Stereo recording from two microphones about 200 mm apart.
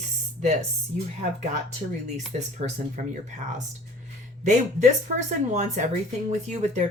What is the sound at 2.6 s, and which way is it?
Speech, 40° right (ahead or behind).